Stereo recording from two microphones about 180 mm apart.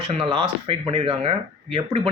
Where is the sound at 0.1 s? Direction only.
35° right (ahead or behind).